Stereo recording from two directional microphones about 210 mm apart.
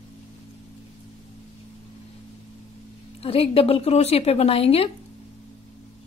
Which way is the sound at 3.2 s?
25° left (ahead or behind).